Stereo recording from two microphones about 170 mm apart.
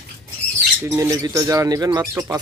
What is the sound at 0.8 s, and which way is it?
Speech, 15° right (ahead or behind).